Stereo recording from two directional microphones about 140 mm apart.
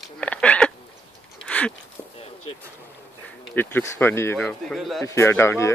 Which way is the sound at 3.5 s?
15° left (ahead or behind).